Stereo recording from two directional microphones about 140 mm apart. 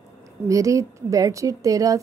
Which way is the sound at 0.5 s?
25° right (ahead or behind).